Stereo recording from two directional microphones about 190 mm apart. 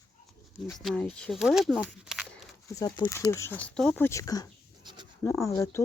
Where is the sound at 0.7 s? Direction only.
Centre (ahead or behind).